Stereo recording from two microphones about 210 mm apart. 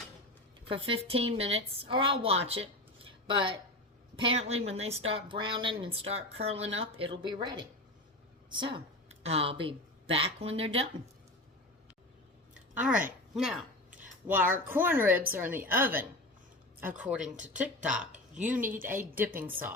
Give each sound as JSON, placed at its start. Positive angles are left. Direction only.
{"t": 0.7, "sound": "a woman's voice", "side_deg": -25}
{"t": 12.7, "sound": "speech", "side_deg": -5}
{"t": 13.3, "sound": "a sound", "side_deg": 0}
{"t": 14.7, "sound": "speech", "side_deg": -10}